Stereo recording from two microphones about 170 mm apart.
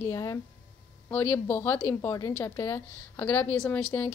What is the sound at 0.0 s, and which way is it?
A woman's voice, 20° left (ahead or behind).